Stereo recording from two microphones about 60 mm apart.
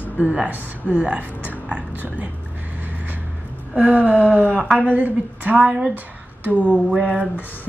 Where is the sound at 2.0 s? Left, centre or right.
Right.